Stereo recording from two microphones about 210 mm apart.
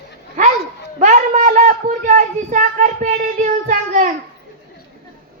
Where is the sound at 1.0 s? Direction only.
35° right (ahead or behind).